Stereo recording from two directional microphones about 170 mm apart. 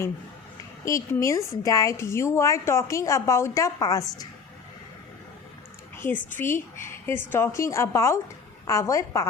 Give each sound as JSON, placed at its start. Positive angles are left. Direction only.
{"t": 0.9, "sound": "a woman's voice", "side_deg": 15}
{"t": 6.0, "sound": "a woman's voice", "side_deg": 10}